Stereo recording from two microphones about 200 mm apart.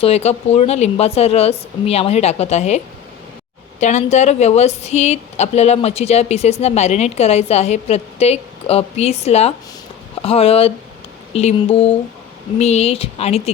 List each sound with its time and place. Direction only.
0.0 s a woman's voice: 30° left (ahead or behind)